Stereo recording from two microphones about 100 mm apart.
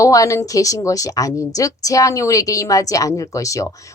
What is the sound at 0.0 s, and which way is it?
A woman's voice, 35° left (ahead or behind).